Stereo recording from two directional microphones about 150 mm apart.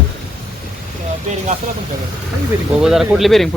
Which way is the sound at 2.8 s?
Centre (ahead or behind).